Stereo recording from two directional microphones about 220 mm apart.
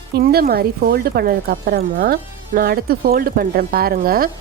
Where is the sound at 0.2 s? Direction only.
40° right (ahead or behind).